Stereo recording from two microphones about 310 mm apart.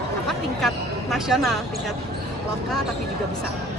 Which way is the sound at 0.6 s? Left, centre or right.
Centre.